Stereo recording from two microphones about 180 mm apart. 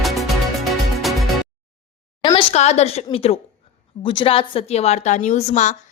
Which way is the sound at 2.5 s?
35° left (ahead or behind).